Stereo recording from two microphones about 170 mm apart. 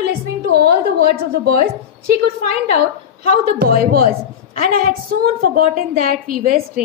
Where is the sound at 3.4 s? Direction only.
60° right (ahead or behind).